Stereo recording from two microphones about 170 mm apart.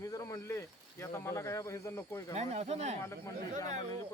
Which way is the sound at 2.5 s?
40° right (ahead or behind).